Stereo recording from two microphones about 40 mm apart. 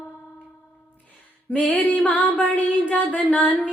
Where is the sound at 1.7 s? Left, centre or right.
Left.